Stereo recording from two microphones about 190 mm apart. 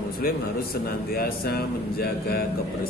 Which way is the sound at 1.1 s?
55° left (ahead or behind).